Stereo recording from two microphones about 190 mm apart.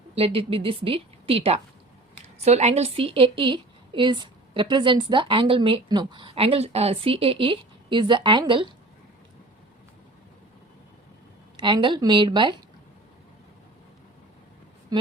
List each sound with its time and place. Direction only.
0.2 s a woman's voice: 30° right (ahead or behind)
11.5 s a woman's voice: 25° right (ahead or behind)